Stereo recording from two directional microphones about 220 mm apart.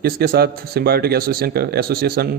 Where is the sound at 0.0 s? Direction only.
45° right (ahead or behind).